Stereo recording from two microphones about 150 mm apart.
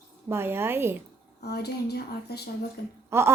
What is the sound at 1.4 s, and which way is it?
A child's voice, 90° left.